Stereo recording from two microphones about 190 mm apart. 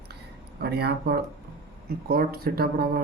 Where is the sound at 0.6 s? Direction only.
60° right (ahead or behind).